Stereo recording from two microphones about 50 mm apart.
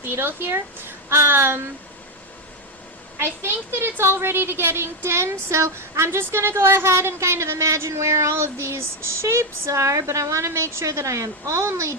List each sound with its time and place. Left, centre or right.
0.0 s speech: right
3.2 s a woman's voice: right